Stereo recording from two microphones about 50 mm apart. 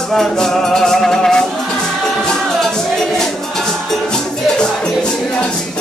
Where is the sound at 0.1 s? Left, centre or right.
Centre.